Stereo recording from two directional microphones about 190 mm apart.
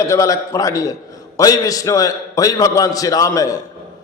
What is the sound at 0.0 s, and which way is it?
A man's voice, 15° left (ahead or behind).